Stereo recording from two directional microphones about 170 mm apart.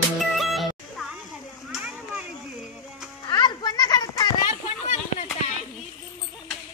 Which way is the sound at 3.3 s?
25° left (ahead or behind).